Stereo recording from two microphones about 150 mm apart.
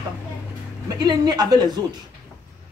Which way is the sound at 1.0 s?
25° right (ahead or behind).